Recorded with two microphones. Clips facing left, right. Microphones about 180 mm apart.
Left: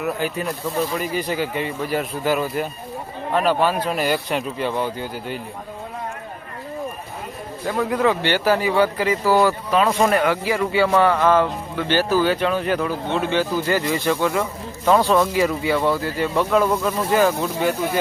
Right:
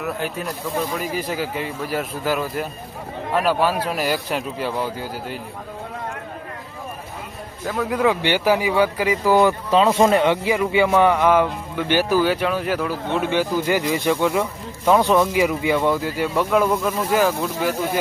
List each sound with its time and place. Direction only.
0.0 s a man's voice: centre (ahead or behind)
7.7 s a man's voice: 5° right (ahead or behind)